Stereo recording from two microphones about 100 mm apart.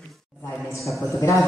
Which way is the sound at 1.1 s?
30° left (ahead or behind).